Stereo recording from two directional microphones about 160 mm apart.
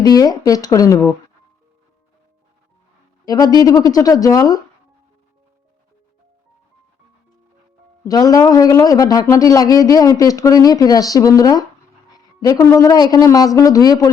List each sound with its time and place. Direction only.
0.0 s speech: 25° left (ahead or behind)
3.2 s speech: 25° left (ahead or behind)
8.0 s speech: 20° left (ahead or behind)